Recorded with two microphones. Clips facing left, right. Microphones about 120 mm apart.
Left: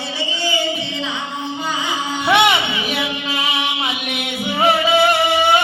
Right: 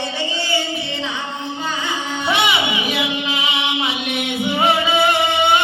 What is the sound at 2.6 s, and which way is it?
Music, 20° right (ahead or behind).